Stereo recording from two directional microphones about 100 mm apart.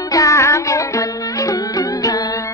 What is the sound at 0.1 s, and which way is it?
Music, 35° left (ahead or behind).